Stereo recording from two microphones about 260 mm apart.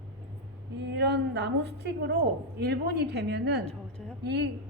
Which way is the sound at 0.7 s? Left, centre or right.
Right.